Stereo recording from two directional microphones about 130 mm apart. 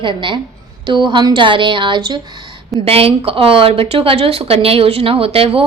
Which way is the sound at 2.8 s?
50° right (ahead or behind).